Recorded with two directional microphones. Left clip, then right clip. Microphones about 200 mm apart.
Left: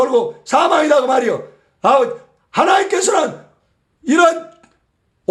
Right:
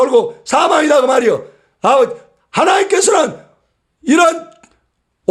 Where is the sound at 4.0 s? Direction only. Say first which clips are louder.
Right 1 dB; 30° right (ahead or behind).